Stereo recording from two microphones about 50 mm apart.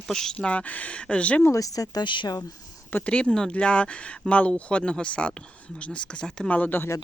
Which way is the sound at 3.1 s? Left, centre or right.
Left.